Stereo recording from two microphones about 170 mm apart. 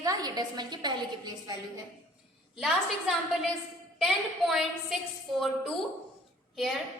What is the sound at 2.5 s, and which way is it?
A woman's voice, centre (ahead or behind).